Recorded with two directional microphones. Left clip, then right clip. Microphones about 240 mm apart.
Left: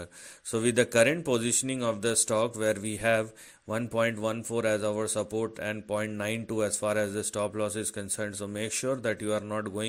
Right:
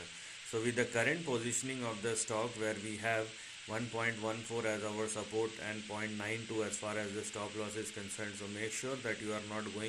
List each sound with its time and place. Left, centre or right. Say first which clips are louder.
0.5 s speech: left 10 dB; left